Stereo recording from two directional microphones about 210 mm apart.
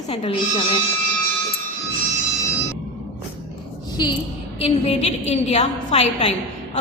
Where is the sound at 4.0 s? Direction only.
20° left (ahead or behind).